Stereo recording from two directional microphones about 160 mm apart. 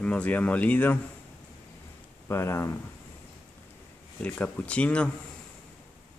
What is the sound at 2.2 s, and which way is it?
Speech, 15° left (ahead or behind).